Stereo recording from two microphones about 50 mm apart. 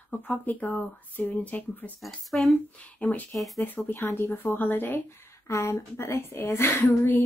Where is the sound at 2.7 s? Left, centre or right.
Left.